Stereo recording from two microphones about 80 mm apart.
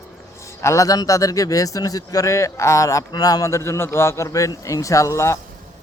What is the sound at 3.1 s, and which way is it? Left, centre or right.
A man's voice, left.